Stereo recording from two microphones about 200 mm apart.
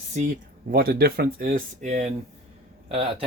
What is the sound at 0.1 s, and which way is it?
Speech, 40° right (ahead or behind).